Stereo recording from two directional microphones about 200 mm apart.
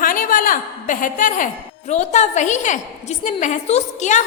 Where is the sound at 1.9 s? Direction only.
35° left (ahead or behind).